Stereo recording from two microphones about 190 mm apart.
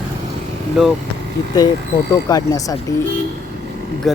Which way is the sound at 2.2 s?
20° left (ahead or behind).